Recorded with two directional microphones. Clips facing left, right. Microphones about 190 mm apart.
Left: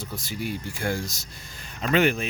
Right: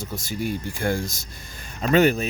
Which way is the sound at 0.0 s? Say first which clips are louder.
Right 4 dB; 45° right (ahead or behind).